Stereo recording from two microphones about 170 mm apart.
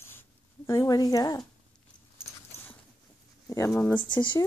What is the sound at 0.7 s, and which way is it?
Speech, 20° left (ahead or behind).